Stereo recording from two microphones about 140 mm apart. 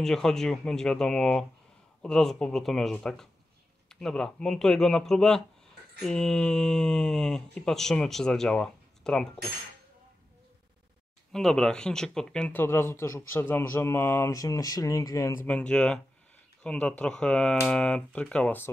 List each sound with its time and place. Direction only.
0.0 s speech: 5° left (ahead or behind)
11.3 s speech: 5° left (ahead or behind); by 15.4 s 20° left (ahead or behind)
15.4 s speech: 10° left (ahead or behind)